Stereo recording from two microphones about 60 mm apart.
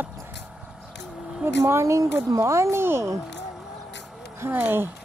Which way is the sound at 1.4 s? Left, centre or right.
Right.